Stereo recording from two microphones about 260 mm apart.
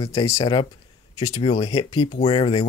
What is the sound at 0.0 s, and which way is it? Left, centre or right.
Speech, left.